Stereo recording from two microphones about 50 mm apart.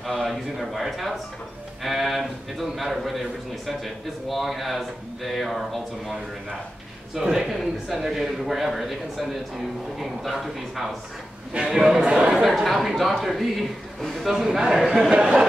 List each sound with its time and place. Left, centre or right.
0.0 s a man's voice: centre
7.2 s a man's voice: centre
12.4 s a man's voice: centre